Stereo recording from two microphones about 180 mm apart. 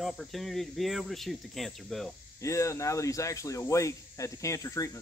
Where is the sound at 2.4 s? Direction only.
15° left (ahead or behind).